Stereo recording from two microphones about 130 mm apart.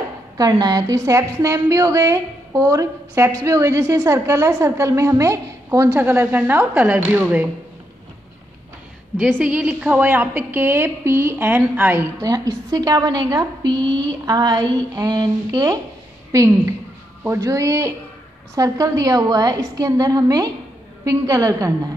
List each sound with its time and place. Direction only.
0.4 s a woman's voice: 30° right (ahead or behind); by 7.4 s 15° right (ahead or behind)
9.4 s a woman's voice: 10° right (ahead or behind)
12.3 s a woman's voice: 25° right (ahead or behind)